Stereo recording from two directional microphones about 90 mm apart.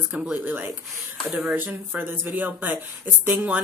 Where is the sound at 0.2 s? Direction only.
20° right (ahead or behind).